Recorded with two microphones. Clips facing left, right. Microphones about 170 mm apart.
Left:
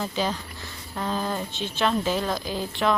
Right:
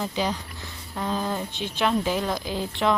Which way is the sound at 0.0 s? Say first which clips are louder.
Even; 15° right (ahead or behind).